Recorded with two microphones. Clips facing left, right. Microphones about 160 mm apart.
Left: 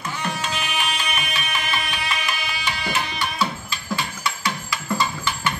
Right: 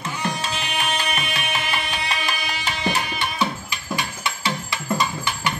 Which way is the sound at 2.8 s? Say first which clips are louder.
Right 3 dB; 20° right (ahead or behind).